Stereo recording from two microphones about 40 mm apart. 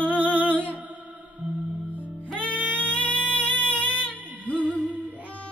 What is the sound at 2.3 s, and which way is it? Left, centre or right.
Music, left.